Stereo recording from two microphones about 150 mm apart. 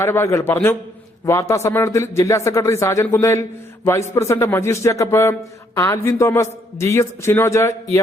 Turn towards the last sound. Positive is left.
turn(degrees=20)  # may be behind; listen again after turning